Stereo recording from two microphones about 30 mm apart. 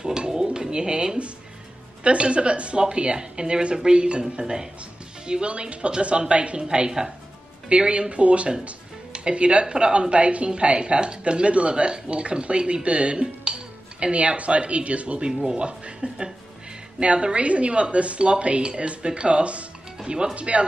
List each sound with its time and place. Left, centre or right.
0.3 s pigeon: right
2.0 s speech: right
7.7 s speech: right
14.1 s speech: right